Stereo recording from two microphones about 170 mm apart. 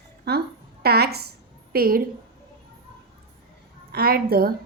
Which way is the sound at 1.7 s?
60° right (ahead or behind).